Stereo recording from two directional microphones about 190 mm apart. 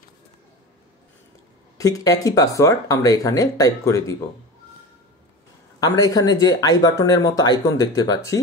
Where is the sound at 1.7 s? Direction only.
20° left (ahead or behind).